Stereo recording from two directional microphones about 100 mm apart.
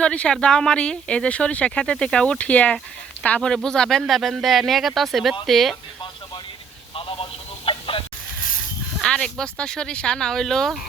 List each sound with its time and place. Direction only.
0.0 s speech: 10° left (ahead or behind)
6.9 s telephone: 65° left (ahead or behind)
9.0 s speech: 5° left (ahead or behind)